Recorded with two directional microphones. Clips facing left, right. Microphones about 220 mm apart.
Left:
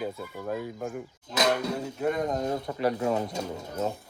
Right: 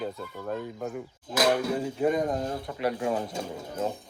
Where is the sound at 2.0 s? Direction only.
5° right (ahead or behind).